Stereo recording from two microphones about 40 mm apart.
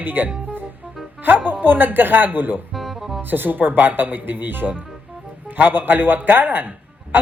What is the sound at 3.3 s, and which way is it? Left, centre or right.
Speech, right.